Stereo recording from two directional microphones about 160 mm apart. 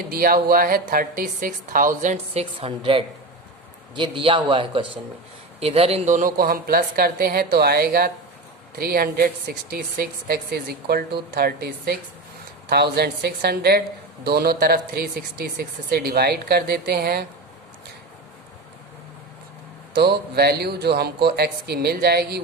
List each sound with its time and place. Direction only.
0.1 s a woman's voice: 70° right (ahead or behind)
12.7 s speech: 90° right
19.9 s speech: 90° right